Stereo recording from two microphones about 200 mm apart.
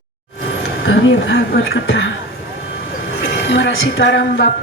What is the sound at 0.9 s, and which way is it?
Speech, 65° left (ahead or behind).